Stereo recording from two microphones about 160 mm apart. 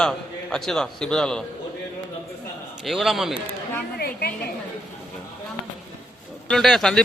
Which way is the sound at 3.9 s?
80° left.